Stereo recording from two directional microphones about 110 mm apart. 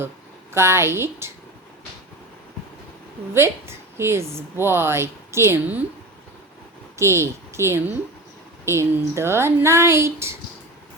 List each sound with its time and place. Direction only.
0.5 s a woman's voice: 25° right (ahead or behind)
3.3 s a woman's voice: 25° right (ahead or behind)
6.9 s a woman's voice: 25° right (ahead or behind)